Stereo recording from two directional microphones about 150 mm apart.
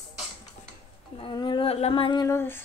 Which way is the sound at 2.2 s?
15° left (ahead or behind).